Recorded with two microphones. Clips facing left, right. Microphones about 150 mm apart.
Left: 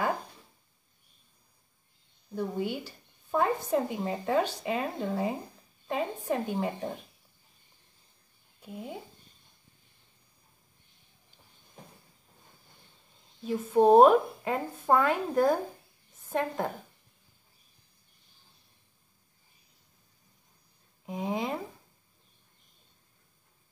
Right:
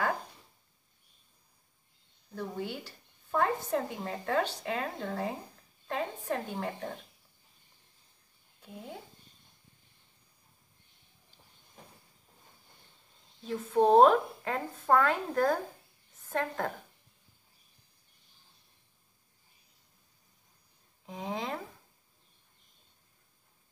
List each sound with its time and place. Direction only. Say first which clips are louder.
2.3 s speech: left 5 dB; 15° left (ahead or behind)
8.5 s speech: left 5 dB; 15° left (ahead or behind)
13.4 s speech: left 3 dB; 10° left (ahead or behind)
21.0 s speech: left 5 dB; 15° left (ahead or behind)